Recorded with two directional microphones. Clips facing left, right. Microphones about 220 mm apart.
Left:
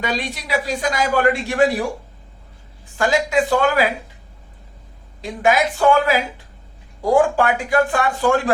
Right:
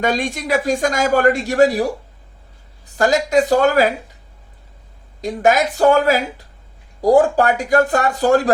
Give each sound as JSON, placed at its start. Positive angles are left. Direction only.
{"t": 0.0, "sound": "speech", "side_deg": -45}
{"t": 2.9, "sound": "speech", "side_deg": -40}
{"t": 5.2, "sound": "speech", "side_deg": -40}